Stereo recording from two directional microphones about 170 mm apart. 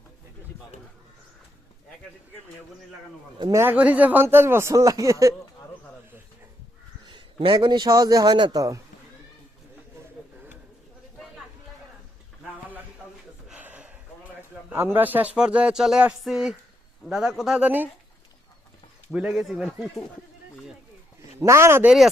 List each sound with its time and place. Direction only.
3.3 s a man's voice: 25° right (ahead or behind)
3.6 s speech: 10° right (ahead or behind)
7.1 s a man's voice: 30° right (ahead or behind)
13.5 s gasp: 10° right (ahead or behind)
14.7 s speech: 10° right (ahead or behind)
19.1 s speech: 5° right (ahead or behind)
21.3 s speech: 15° right (ahead or behind)